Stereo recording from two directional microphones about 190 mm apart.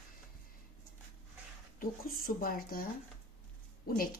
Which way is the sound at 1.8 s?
50° left (ahead or behind).